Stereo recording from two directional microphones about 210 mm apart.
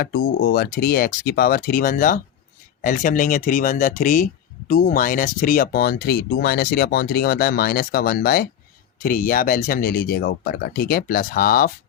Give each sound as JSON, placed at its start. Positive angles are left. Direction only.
{"t": 0.0, "sound": "speech", "side_deg": 45}